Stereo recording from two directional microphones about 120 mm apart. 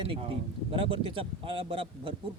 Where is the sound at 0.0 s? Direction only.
50° right (ahead or behind).